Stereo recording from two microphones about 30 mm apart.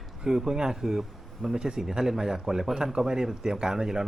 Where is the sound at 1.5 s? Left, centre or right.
Right.